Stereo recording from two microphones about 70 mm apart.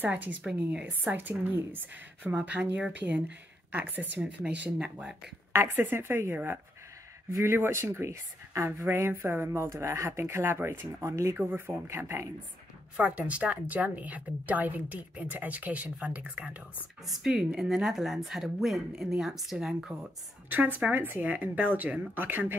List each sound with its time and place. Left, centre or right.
0.0 s a woman's voice: right
5.6 s speech: right
7.2 s speech: right
7.5 s speech: right
11.3 s speech: right
12.9 s a woman's voice: right
17.0 s speech: centre
20.4 s a woman's voice: right